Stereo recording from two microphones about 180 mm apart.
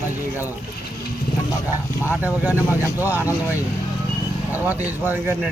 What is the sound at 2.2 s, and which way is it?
Speech, 10° right (ahead or behind).